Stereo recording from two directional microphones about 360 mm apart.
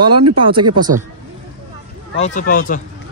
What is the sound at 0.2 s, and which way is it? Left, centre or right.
Speech, right.